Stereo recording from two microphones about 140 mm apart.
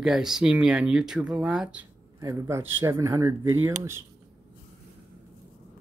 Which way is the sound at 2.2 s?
20° right (ahead or behind).